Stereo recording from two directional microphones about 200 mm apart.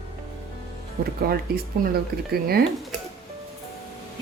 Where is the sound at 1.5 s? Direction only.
50° right (ahead or behind).